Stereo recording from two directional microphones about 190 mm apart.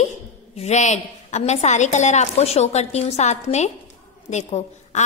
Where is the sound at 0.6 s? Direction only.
35° left (ahead or behind).